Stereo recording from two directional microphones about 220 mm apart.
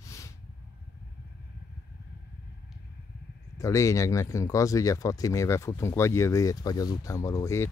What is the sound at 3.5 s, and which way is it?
Speech, 15° left (ahead or behind).